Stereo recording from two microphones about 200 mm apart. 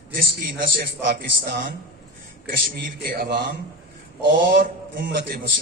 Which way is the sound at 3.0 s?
45° right (ahead or behind).